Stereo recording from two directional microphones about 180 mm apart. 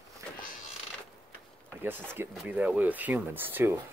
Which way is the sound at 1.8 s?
10° right (ahead or behind).